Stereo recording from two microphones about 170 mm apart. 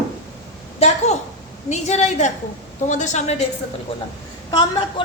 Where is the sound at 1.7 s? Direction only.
40° left (ahead or behind).